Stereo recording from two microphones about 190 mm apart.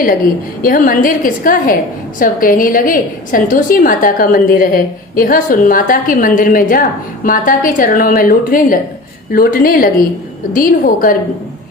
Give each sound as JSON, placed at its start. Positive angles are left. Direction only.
{"t": 0.6, "sound": "a woman's voice", "side_deg": 45}